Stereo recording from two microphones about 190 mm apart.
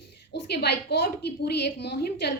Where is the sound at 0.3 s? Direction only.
60° left (ahead or behind).